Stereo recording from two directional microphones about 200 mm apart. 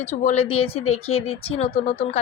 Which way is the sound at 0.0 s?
35° left (ahead or behind).